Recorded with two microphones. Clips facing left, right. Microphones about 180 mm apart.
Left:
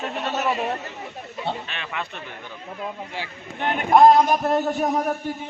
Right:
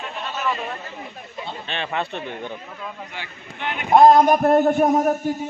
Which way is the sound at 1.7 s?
30° right (ahead or behind).